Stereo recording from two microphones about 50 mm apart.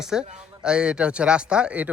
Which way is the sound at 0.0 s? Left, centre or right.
Centre.